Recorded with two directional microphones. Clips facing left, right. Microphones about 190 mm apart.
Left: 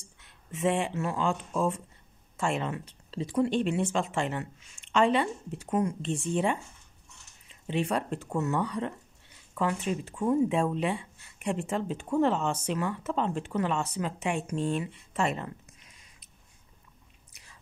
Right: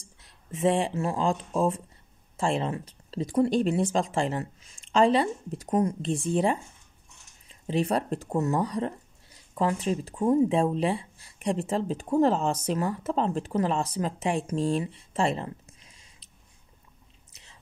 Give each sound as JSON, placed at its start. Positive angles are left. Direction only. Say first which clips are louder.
{"t": 0.2, "sound": "speech", "louder": "right 3 dB", "side_deg": -35}
{"t": 17.3, "sound": "chewing", "louder": "right 1 dB", "side_deg": -25}